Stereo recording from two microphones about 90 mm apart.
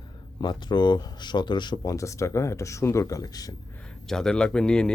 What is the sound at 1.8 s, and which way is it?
Speech, 35° left (ahead or behind).